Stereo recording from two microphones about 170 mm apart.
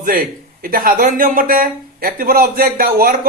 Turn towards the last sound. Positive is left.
turn(degrees=-55)  # may be behind; listen again after turning